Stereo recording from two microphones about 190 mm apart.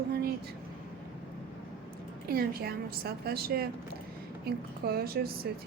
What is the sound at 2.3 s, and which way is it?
A woman's voice, 55° right (ahead or behind).